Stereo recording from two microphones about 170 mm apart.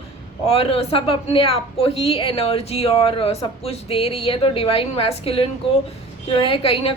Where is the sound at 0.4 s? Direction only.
35° left (ahead or behind).